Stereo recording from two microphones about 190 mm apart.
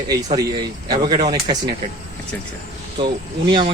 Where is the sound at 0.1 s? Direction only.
20° right (ahead or behind).